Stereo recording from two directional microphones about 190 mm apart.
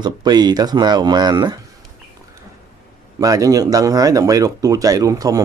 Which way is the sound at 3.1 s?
20° right (ahead or behind).